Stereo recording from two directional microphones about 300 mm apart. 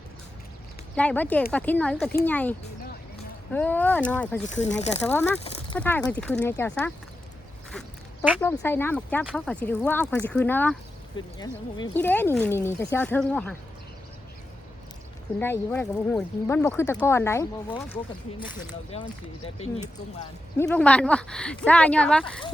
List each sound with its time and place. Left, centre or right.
0.9 s speech: centre
4.4 s speech: left
5.0 s speech: centre
7.7 s quack: centre
8.4 s speech: centre
15.4 s speech: centre
20.6 s speech: centre